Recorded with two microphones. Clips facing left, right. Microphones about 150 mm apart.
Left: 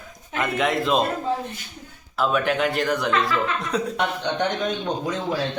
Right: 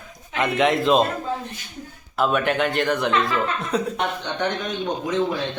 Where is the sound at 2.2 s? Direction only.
Centre (ahead or behind).